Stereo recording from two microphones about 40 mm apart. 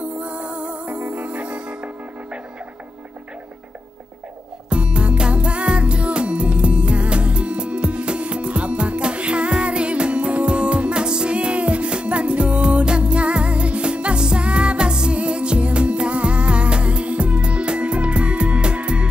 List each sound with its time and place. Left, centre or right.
0.0 s music: right
4.6 s music: right